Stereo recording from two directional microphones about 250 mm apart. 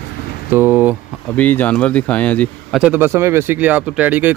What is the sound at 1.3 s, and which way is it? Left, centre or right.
Speech, centre.